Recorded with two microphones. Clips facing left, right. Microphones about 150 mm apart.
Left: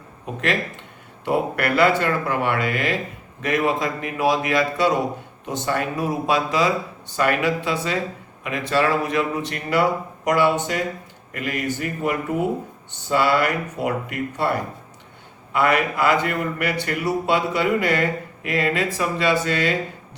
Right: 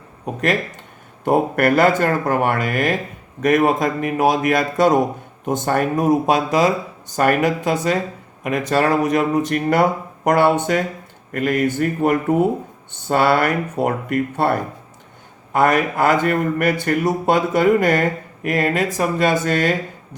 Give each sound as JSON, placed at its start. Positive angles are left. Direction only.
{"t": 1.2, "sound": "speech", "side_deg": -50}